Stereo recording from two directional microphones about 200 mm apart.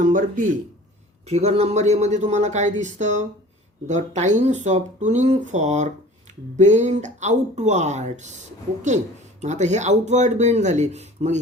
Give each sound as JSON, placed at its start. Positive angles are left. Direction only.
{"t": 0.0, "sound": "speech", "side_deg": -40}